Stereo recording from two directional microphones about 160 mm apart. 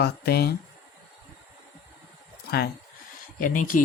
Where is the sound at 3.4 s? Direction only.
60° left (ahead or behind).